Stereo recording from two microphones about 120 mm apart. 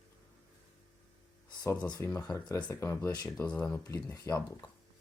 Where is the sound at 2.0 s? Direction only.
25° left (ahead or behind).